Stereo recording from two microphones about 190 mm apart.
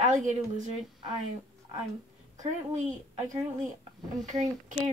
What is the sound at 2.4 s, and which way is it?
Speech, 40° right (ahead or behind).